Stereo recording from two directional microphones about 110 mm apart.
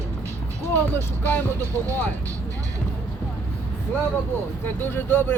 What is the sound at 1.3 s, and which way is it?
Speech, 15° left (ahead or behind).